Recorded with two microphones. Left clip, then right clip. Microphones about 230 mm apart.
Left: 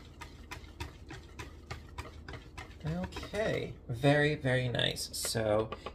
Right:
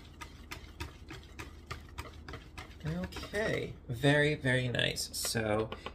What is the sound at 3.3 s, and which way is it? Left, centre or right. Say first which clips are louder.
Speech: even; centre.